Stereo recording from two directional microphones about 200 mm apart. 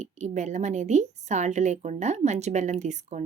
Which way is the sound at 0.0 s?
35° right (ahead or behind).